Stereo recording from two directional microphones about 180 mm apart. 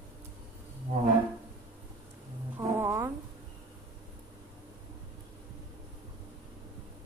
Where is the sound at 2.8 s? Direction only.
15° right (ahead or behind).